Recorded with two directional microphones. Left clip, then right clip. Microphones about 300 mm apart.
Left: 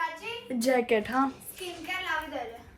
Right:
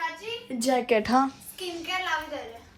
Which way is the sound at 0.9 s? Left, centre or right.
Right.